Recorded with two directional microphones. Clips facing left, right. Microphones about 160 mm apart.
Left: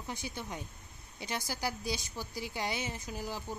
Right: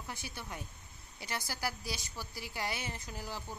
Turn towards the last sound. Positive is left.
turn(degrees=15)  # may be behind; listen again after turning